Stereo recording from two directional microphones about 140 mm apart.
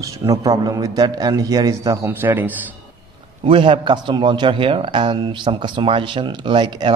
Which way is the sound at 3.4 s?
40° right (ahead or behind).